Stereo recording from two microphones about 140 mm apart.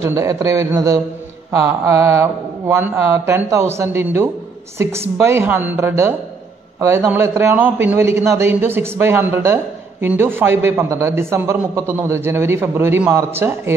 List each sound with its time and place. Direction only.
0.0 s a man's voice: 20° right (ahead or behind)